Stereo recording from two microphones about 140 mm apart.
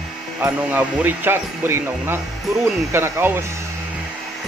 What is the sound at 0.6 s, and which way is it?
Speech, 10° right (ahead or behind).